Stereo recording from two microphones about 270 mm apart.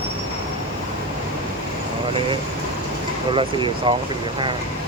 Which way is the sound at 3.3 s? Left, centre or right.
Centre.